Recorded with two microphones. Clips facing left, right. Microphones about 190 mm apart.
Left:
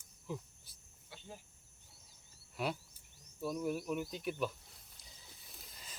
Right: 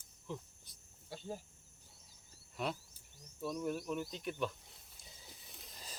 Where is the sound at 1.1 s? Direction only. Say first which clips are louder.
Right 8 dB; 40° right (ahead or behind).